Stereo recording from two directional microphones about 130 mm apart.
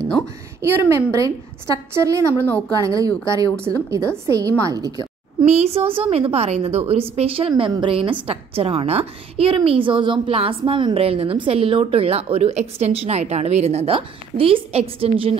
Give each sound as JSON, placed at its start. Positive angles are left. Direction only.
{"t": 0.6, "sound": "a woman's voice", "side_deg": -20}
{"t": 5.4, "sound": "a woman's voice", "side_deg": -55}
{"t": 13.9, "sound": "a woman's voice", "side_deg": -45}